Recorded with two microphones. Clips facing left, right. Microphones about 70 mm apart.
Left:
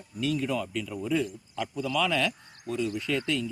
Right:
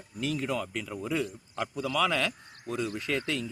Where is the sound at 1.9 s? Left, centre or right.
Right.